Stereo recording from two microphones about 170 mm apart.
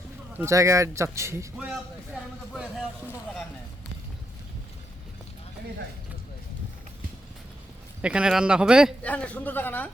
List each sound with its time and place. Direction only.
0.3 s speech: 15° right (ahead or behind)
2.5 s speech: centre (ahead or behind)
8.0 s speech: 5° right (ahead or behind)
9.0 s a woman's voice: 10° left (ahead or behind)